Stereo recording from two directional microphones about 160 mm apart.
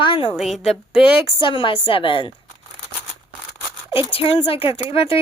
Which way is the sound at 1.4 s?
30° left (ahead or behind).